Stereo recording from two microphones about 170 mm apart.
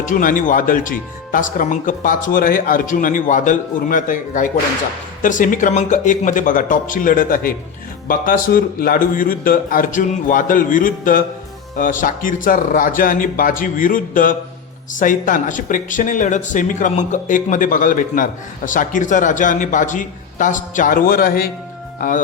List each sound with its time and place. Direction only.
0.0 s speech: 50° left (ahead or behind)